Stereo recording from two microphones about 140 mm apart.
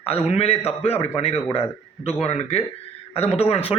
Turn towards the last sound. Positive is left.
turn(degrees=45)  # may be behind; listen again after turning